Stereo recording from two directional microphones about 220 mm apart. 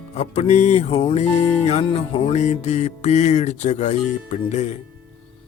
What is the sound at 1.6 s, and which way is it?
Mantra, 30° left (ahead or behind).